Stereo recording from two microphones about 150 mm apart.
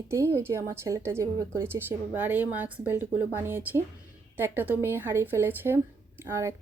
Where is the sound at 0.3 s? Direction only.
15° right (ahead or behind).